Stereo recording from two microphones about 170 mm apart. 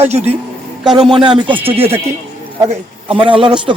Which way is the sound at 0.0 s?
40° right (ahead or behind).